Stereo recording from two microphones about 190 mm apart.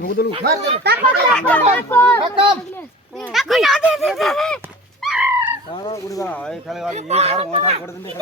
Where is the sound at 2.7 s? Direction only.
Centre (ahead or behind).